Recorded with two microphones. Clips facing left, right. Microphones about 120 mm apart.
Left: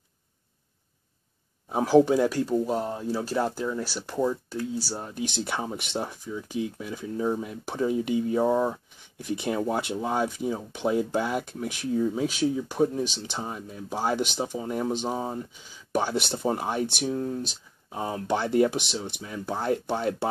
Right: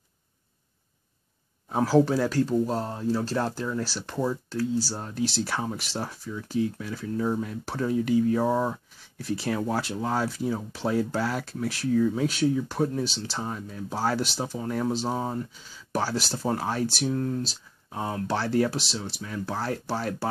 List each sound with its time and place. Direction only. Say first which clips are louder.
1.7 s speech: left 2 dB; 10° left (ahead or behind)